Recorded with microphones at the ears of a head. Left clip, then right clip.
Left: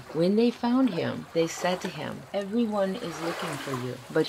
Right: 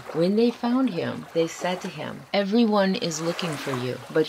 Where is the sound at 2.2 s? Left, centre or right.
Right.